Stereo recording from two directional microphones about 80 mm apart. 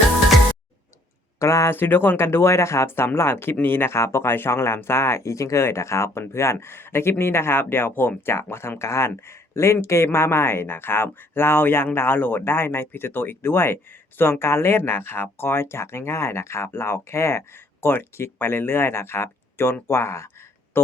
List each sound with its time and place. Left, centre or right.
1.4 s speech: left